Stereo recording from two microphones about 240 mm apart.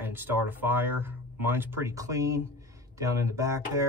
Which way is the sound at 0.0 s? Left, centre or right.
Centre.